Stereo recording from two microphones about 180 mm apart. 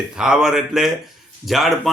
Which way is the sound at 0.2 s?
5° right (ahead or behind).